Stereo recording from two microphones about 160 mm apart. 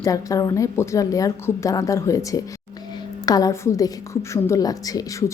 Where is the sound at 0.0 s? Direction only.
20° left (ahead or behind).